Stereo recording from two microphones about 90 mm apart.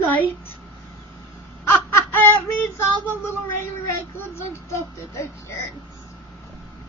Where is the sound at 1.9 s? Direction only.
20° left (ahead or behind).